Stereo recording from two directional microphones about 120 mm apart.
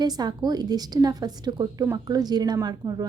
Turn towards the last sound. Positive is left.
turn(degrees=-35)  # may be behind; listen again after turning